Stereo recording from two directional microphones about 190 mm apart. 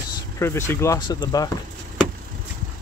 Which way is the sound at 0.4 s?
15° left (ahead or behind).